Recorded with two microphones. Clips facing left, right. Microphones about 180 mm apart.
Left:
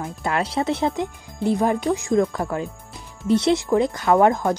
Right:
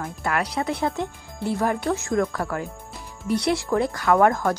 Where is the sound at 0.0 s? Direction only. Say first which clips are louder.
Left 2 dB; 20° left (ahead or behind).